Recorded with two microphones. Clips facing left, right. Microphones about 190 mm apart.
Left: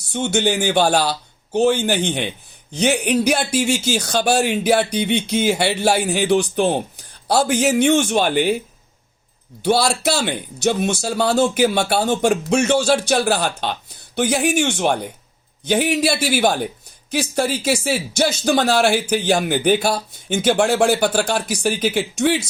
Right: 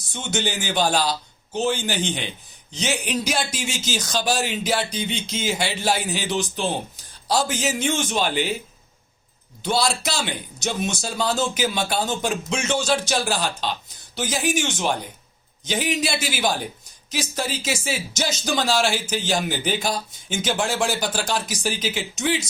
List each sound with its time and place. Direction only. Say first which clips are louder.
0.1 s speech: left 7 dB; 55° left (ahead or behind)
9.6 s speech: left 6 dB; 60° left (ahead or behind)
12.1 s speech: left 8 dB; 50° left (ahead or behind)